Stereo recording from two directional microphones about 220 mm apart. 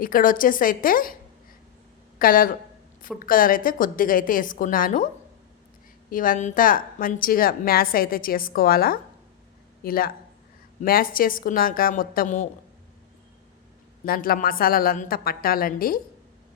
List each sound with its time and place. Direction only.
0.0 s a woman's voice: 40° left (ahead or behind)
2.1 s a woman's voice: 40° left (ahead or behind)
6.1 s a woman's voice: 40° left (ahead or behind)
14.0 s a woman's voice: 40° left (ahead or behind)